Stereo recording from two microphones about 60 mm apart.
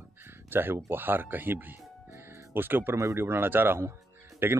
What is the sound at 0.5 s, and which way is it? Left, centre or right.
Speech, right.